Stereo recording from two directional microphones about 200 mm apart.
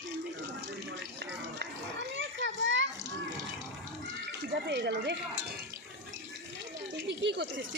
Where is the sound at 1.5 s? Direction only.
65° right (ahead or behind).